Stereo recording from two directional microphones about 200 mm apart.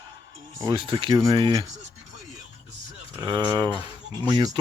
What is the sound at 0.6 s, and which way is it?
Speech, 20° right (ahead or behind).